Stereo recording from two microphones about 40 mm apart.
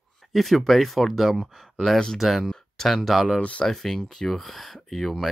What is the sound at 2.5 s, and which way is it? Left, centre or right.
Speech, centre.